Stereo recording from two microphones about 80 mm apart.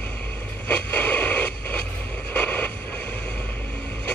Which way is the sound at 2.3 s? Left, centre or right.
Left.